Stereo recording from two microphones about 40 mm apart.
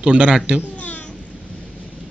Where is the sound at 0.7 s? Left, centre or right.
Left.